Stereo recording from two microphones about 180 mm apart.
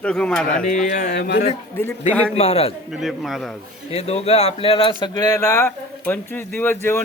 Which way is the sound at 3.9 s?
35° left (ahead or behind).